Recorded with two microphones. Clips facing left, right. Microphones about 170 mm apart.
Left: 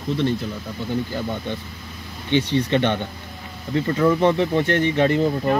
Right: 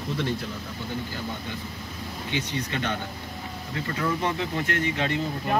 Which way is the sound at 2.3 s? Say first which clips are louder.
Left 11 dB; 25° left (ahead or behind).